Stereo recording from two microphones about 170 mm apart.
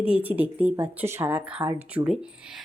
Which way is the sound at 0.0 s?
10° right (ahead or behind).